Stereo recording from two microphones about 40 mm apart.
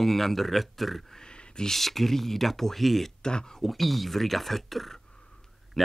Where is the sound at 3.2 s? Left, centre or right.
Centre.